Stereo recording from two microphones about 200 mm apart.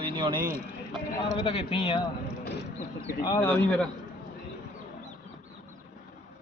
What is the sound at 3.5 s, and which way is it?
Speech, 5° left (ahead or behind).